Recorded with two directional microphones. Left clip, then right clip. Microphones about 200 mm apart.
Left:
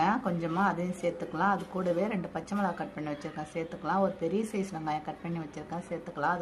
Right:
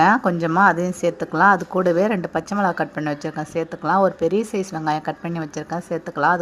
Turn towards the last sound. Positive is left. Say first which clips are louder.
# right 12 dB
turn(degrees=-30)  # may be behind; listen again after turning